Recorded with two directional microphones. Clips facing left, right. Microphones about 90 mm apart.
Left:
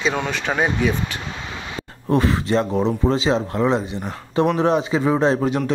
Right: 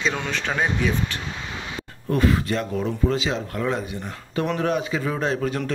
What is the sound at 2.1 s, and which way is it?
A man's voice, 30° left (ahead or behind).